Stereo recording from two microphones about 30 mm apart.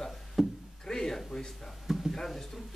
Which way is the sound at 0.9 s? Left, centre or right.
Centre.